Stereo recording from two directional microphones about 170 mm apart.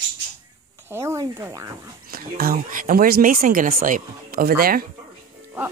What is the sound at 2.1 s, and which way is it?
Speech, 60° right (ahead or behind).